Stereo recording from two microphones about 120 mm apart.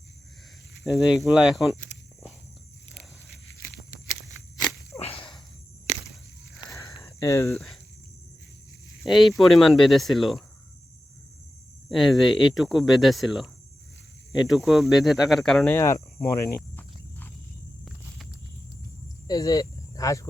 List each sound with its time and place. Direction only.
0.9 s speech: 5° right (ahead or behind)
4.9 s whip: 55° left (ahead or behind)
6.7 s a sound: 25° left (ahead or behind)
7.5 s speech: centre (ahead or behind)
9.0 s speech: centre (ahead or behind)
11.9 s speech: centre (ahead or behind)
15.7 s speech: 25° left (ahead or behind)
16.6 s cricket: 15° left (ahead or behind)
19.3 s speech: 30° left (ahead or behind)